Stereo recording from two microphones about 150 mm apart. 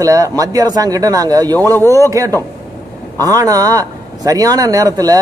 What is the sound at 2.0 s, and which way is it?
A man's voice, 20° right (ahead or behind).